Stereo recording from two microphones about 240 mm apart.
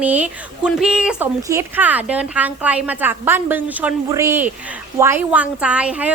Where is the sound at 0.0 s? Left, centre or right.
Centre.